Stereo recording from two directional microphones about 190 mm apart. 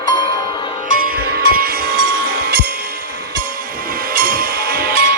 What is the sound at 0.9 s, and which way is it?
Music, 50° right (ahead or behind).